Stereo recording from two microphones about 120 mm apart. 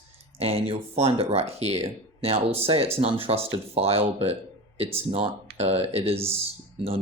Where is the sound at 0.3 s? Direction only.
55° right (ahead or behind).